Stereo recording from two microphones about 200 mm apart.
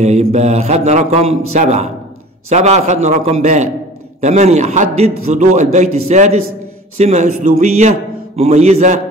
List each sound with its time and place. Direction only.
0.0 s mantra: 35° right (ahead or behind)